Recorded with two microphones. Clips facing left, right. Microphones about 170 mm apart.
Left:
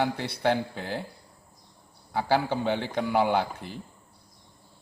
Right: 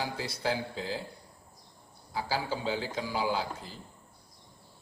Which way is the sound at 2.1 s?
60° left (ahead or behind).